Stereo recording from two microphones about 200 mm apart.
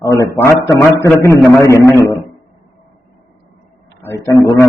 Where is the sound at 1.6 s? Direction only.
15° left (ahead or behind).